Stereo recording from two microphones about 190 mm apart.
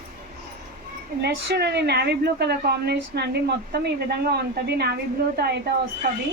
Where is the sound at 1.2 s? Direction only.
60° right (ahead or behind).